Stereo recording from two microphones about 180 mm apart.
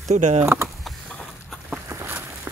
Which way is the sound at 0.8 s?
Centre (ahead or behind).